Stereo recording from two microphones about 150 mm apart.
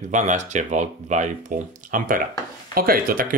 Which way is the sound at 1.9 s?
65° right (ahead or behind).